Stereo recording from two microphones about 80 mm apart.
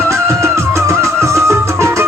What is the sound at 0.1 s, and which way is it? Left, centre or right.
Music, right.